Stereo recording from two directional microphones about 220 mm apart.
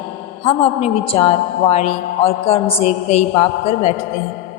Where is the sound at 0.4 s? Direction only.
25° left (ahead or behind).